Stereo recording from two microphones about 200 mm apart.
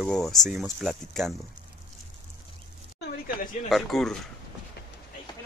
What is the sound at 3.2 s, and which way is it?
Speech, 45° left (ahead or behind).